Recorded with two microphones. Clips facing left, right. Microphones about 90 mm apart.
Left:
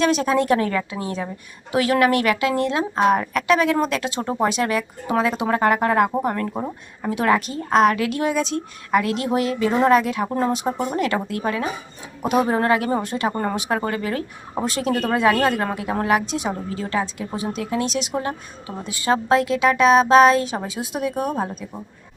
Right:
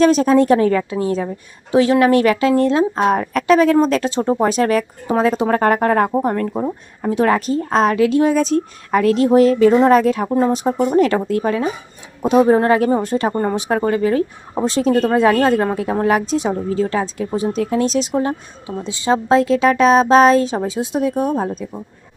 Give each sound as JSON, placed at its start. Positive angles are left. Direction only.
{"t": 0.0, "sound": "a woman's voice", "side_deg": -35}
{"t": 6.5, "sound": "speech", "side_deg": -10}
{"t": 7.1, "sound": "a woman's voice", "side_deg": -35}
{"t": 13.3, "sound": "speech", "side_deg": -15}
{"t": 13.6, "sound": "a woman's voice", "side_deg": -30}
{"t": 18.9, "sound": "a woman's voice", "side_deg": -25}